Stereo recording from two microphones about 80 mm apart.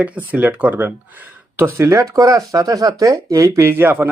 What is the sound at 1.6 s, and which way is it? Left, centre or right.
Speech, right.